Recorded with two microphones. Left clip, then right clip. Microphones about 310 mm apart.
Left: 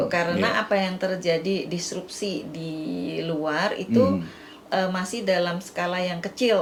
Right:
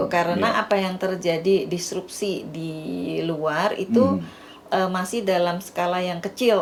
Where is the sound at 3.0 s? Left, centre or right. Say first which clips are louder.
Right 3 dB; right.